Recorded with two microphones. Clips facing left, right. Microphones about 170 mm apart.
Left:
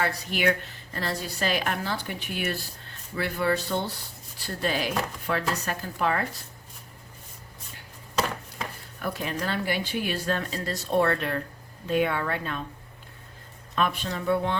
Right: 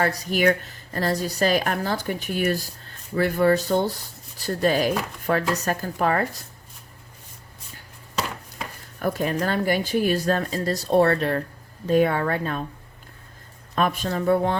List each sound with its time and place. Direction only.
0.0 s speech: 40° right (ahead or behind)
9.0 s a woman's voice: 45° right (ahead or behind)
13.7 s speech: 45° right (ahead or behind)